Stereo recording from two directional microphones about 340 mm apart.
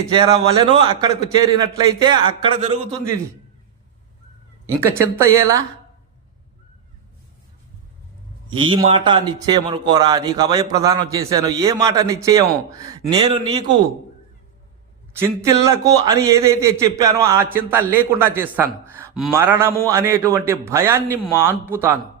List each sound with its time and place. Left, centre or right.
0.1 s a man's voice: centre
4.8 s a man's voice: centre
8.4 s a man's voice: centre
15.1 s a man's voice: centre